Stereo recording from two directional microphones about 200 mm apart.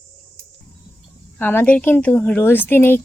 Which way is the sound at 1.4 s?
10° left (ahead or behind).